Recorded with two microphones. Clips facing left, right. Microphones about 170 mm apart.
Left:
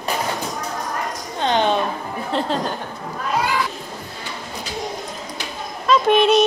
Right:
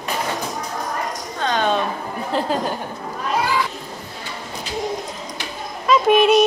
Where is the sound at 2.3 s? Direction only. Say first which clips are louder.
Even; centre (ahead or behind).